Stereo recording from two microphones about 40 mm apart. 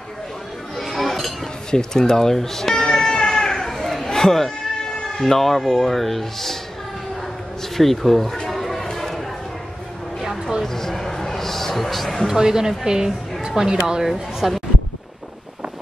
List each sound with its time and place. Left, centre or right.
0.7 s chink: centre
1.7 s music: centre
5.1 s speech: centre
7.7 s a sound: centre
10.6 s a man's voice: centre
12.3 s a woman's voice: centre
14.0 s speech: centre